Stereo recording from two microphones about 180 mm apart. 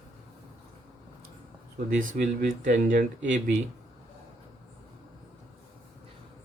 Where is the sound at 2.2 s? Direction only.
45° right (ahead or behind).